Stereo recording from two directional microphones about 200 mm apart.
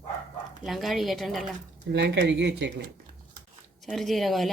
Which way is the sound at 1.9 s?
60° right (ahead or behind).